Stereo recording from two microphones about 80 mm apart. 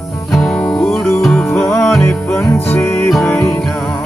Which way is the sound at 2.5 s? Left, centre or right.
Left.